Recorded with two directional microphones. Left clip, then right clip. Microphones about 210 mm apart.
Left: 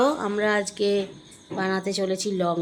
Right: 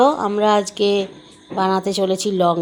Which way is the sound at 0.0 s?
10° right (ahead or behind).